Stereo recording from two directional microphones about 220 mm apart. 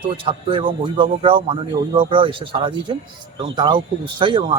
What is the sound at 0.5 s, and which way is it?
Speech, 25° right (ahead or behind).